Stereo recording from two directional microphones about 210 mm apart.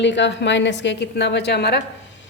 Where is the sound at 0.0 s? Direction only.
60° left (ahead or behind).